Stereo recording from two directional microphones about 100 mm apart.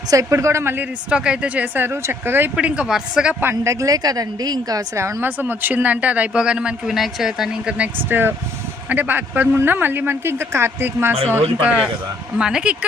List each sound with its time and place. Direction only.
0.1 s speech: 30° right (ahead or behind)
1.1 s speech: 10° right (ahead or behind)
3.4 s a woman's voice: 30° right (ahead or behind); by 12.7 s 10° right (ahead or behind)